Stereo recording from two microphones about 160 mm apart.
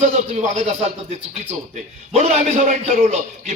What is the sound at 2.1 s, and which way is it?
A man's voice, 45° right (ahead or behind).